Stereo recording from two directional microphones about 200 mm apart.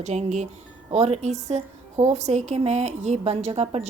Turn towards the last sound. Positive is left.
turn(degrees=-30)  # may be behind; listen again after turning